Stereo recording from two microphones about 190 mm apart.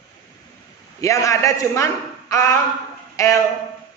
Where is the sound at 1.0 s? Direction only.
15° left (ahead or behind).